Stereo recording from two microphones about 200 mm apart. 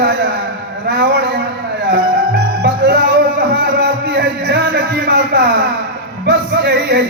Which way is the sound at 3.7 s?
55° right (ahead or behind).